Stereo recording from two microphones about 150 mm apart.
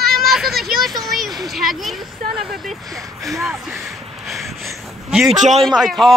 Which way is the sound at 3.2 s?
Centre (ahead or behind).